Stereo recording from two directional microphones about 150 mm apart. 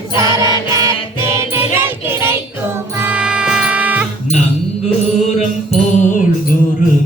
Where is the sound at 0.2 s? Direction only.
20° right (ahead or behind).